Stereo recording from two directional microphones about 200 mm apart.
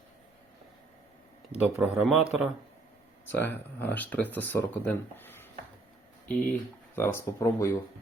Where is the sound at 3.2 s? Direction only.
10° left (ahead or behind).